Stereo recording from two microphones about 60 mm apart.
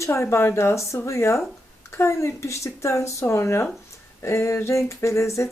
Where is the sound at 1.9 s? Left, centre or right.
Left.